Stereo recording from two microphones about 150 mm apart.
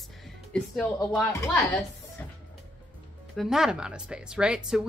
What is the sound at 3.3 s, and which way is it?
A woman's voice, centre (ahead or behind).